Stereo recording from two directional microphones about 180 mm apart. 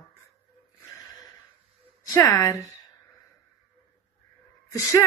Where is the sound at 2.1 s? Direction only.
15° left (ahead or behind).